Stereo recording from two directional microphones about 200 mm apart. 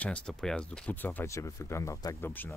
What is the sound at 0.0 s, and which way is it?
Speech, 5° left (ahead or behind).